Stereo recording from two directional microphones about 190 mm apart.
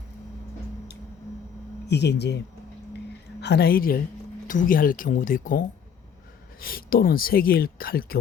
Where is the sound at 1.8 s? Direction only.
60° left (ahead or behind); by 5.6 s 45° left (ahead or behind).